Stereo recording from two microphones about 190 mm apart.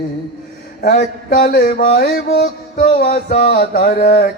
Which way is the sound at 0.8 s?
50° left (ahead or behind).